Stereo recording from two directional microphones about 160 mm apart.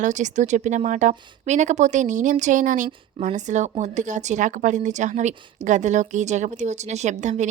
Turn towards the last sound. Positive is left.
turn(degrees=-50)  # may be behind; listen again after turning